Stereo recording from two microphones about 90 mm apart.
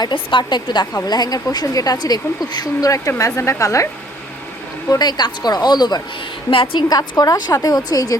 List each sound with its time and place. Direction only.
0.0 s a woman's voice: 60° left (ahead or behind); by 3.8 s 35° left (ahead or behind)
4.9 s a woman's voice: 50° left (ahead or behind)
6.5 s a woman's voice: 70° left (ahead or behind)
6.8 s a woman's voice: 45° left (ahead or behind)